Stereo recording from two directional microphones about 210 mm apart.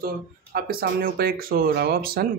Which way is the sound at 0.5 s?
45° right (ahead or behind).